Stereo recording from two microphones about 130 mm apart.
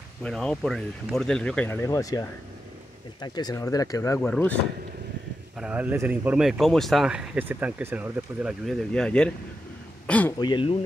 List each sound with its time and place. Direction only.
0.2 s speech: 5° left (ahead or behind)
1.7 s speech: 25° left (ahead or behind)
4.2 s speech: 10° left (ahead or behind)
5.6 s speech: 10° right (ahead or behind)
8.9 s speech: 5° left (ahead or behind)
10.4 s speech: 40° left (ahead or behind)